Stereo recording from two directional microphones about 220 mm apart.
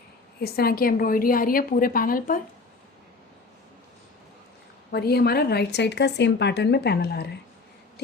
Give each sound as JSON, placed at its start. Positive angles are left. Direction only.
{"t": 0.3, "sound": "a woman's voice", "side_deg": 45}
{"t": 4.9, "sound": "speech", "side_deg": 45}